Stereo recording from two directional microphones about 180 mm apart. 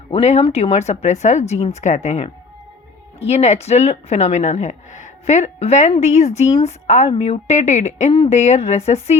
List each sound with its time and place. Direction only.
0.1 s speech: 35° left (ahead or behind)